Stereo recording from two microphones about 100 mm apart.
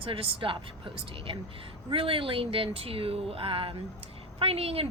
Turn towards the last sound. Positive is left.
turn(degrees=-75)  # may be behind; listen again after turning